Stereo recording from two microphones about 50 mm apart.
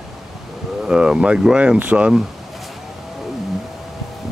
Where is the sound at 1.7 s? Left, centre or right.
Right.